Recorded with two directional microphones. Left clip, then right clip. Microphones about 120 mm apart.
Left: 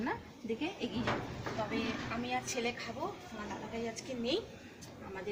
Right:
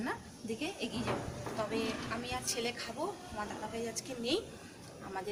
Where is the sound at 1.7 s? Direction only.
25° right (ahead or behind).